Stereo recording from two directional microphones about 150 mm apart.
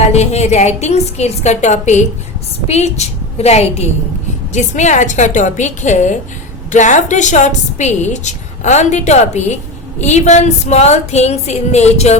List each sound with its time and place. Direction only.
0.0 s a woman's voice: 45° left (ahead or behind)